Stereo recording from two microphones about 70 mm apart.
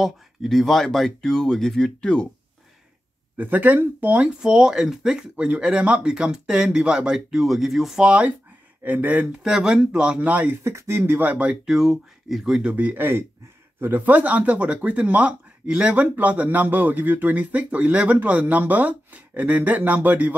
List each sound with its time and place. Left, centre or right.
0.0 s speech: centre
3.3 s speech: right
4.4 s speech: centre
8.1 s speech: centre
10.6 s speech: right
11.6 s speech: centre
12.9 s speech: right